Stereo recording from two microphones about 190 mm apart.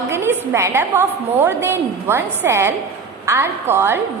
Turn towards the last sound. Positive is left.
turn(degrees=-10)  # may be behind; listen again after turning